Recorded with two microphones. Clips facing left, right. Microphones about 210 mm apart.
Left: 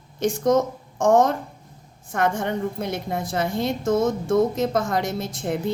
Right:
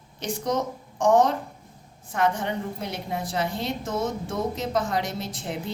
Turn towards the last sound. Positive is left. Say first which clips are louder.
# left 6 dB
turn(degrees=50)  # may be behind; listen again after turning